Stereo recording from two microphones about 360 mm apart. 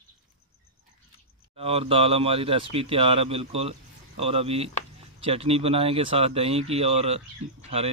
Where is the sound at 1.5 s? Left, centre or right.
Centre.